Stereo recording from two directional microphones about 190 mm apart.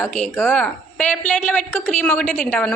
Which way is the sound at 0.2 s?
5° left (ahead or behind).